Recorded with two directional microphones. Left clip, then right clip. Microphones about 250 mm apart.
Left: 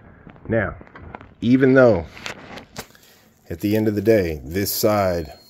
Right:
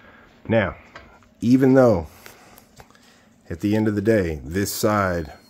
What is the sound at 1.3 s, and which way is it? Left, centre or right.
Speech, centre.